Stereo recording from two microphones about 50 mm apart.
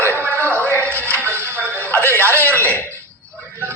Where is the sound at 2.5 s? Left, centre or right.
Right.